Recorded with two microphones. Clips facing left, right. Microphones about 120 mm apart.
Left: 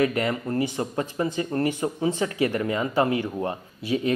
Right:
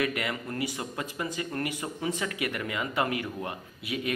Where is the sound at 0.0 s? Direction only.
35° left (ahead or behind).